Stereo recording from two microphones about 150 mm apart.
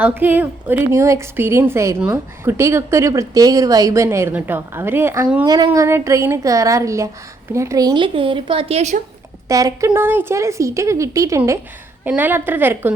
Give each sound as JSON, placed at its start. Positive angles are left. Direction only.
{"t": 0.0, "sound": "a woman's voice", "side_deg": -10}
{"t": 9.5, "sound": "a woman's voice", "side_deg": -20}